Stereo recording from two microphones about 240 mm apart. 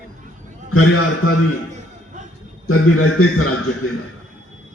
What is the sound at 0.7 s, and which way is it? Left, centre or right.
Speech, left.